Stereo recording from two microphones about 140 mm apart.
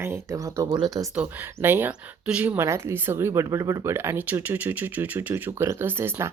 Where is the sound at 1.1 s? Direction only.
15° right (ahead or behind).